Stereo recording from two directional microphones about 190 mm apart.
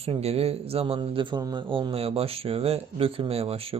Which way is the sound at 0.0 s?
30° right (ahead or behind).